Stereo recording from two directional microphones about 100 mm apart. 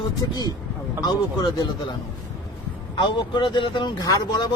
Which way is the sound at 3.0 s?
50° left (ahead or behind).